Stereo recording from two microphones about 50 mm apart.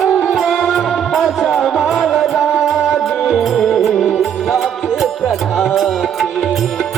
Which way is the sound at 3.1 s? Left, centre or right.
Centre.